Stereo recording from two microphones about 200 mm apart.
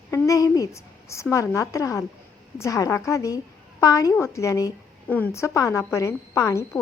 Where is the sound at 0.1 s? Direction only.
15° left (ahead or behind).